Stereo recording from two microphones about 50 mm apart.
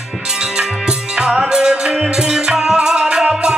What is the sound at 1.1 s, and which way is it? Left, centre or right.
Music, centre.